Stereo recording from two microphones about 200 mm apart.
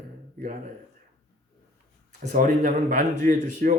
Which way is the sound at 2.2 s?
35° right (ahead or behind).